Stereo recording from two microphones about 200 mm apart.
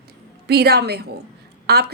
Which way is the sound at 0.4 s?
55° right (ahead or behind).